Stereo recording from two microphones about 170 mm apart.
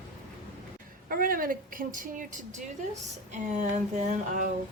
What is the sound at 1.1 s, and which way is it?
A woman's voice, 55° right (ahead or behind).